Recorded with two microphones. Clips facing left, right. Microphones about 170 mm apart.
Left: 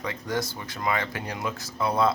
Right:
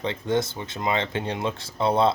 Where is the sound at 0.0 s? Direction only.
25° right (ahead or behind).